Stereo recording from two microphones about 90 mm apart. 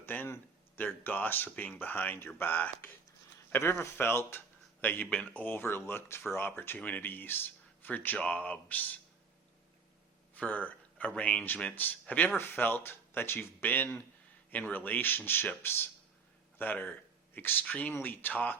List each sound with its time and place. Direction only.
0.0 s speech: 20° left (ahead or behind)
10.3 s speech: 15° left (ahead or behind)